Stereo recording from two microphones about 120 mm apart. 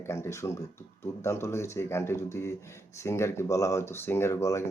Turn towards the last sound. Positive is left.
turn(degrees=25)  # may be behind; listen again after turning